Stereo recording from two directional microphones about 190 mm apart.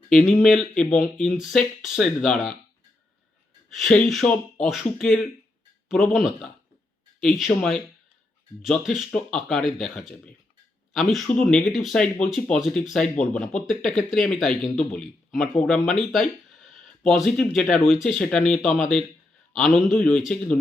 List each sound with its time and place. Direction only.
0.1 s speech: centre (ahead or behind)
3.7 s speech: centre (ahead or behind)
11.1 s speech: 5° left (ahead or behind)
16.6 s a sound: centre (ahead or behind)
17.8 s speech: centre (ahead or behind)
18.6 s a man's voice: 40° left (ahead or behind)
19.9 s speech: centre (ahead or behind)